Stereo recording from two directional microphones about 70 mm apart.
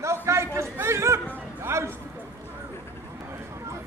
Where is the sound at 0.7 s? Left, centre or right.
Right.